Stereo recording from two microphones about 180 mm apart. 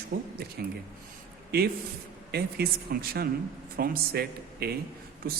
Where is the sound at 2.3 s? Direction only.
60° right (ahead or behind).